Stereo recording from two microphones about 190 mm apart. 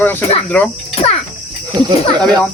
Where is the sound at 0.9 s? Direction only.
30° left (ahead or behind).